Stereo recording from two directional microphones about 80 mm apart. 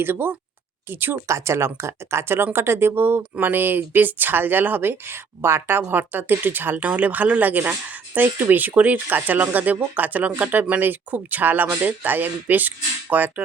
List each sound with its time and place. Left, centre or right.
0.0 s speech: right